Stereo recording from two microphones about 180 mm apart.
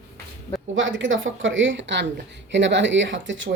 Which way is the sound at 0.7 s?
90° right.